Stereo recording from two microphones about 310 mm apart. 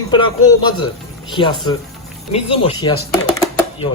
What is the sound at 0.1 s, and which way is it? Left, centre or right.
Speech, centre.